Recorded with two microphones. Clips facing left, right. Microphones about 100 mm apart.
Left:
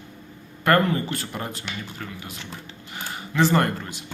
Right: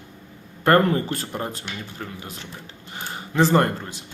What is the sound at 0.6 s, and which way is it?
Speech, 35° right (ahead or behind).